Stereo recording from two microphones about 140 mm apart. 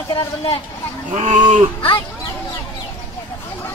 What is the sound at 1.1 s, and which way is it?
Speech, 60° right (ahead or behind).